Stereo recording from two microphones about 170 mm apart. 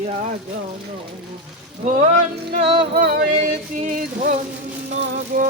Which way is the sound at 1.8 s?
45° right (ahead or behind).